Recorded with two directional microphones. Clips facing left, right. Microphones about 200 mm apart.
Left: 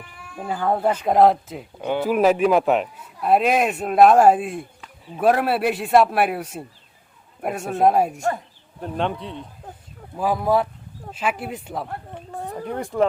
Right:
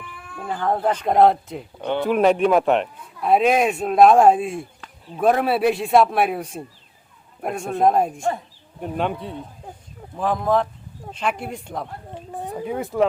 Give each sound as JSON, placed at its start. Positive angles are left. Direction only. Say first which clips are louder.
{"t": 0.4, "sound": "speech", "louder": "left 1 dB", "side_deg": 10}
{"t": 8.8, "sound": "speech", "louder": "right 1 dB", "side_deg": -5}
{"t": 10.2, "sound": "speech", "louder": "even", "side_deg": 5}
{"t": 12.1, "sound": "a sound", "louder": "right 4 dB", "side_deg": -15}
{"t": 12.6, "sound": "speech", "louder": "right 1 dB", "side_deg": -5}